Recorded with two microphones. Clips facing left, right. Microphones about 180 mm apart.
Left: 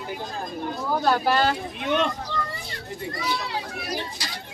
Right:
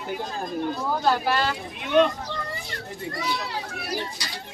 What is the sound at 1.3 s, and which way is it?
Speech, 40° left (ahead or behind).